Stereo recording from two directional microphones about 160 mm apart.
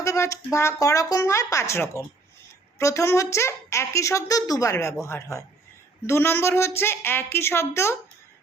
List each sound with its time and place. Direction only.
0.0 s a woman's voice: 20° left (ahead or behind)